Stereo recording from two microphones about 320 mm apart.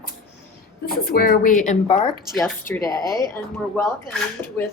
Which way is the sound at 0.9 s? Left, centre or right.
Left.